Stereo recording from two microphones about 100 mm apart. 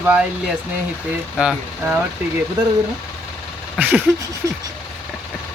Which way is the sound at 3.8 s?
15° right (ahead or behind).